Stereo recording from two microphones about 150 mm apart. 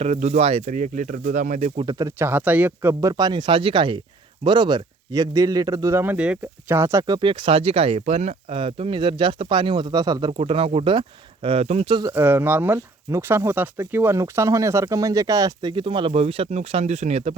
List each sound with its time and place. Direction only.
0.0 s speech: 50° right (ahead or behind)
0.7 s speech: 55° right (ahead or behind)
1.9 s speech: 20° right (ahead or behind)
7.2 s speech: 35° right (ahead or behind)
10.3 s speech: 40° right (ahead or behind)
12.1 s speech: 10° right (ahead or behind); by 17.3 s 45° right (ahead or behind)